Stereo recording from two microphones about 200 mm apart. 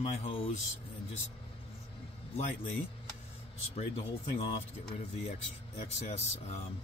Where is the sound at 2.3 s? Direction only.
35° left (ahead or behind).